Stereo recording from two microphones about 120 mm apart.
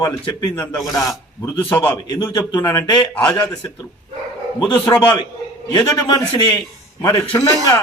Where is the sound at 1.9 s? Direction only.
35° left (ahead or behind).